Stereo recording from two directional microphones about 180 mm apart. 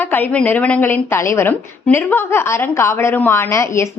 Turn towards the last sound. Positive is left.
turn(degrees=15)  # may be behind; listen again after turning